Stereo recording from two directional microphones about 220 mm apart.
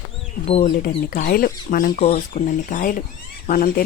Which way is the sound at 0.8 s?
40° left (ahead or behind).